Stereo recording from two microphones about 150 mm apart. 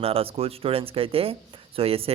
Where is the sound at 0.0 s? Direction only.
40° right (ahead or behind).